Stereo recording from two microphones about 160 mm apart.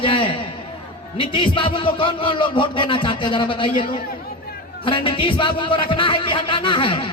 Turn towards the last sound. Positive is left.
turn(degrees=35)  # may be behind; listen again after turning